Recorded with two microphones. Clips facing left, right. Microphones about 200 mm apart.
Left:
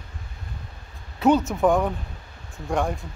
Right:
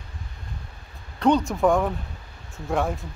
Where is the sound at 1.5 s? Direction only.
Centre (ahead or behind).